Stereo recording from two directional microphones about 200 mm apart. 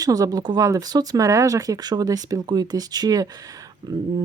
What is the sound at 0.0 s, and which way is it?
Speech, 20° right (ahead or behind).